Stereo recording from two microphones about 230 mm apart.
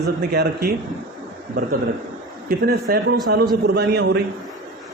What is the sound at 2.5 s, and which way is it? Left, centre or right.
A man's voice, right.